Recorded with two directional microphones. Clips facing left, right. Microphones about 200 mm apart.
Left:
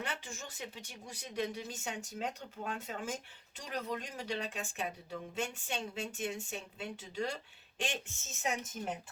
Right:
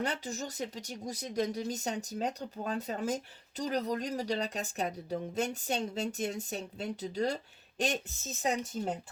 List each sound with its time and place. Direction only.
0.0 s speech: 40° right (ahead or behind)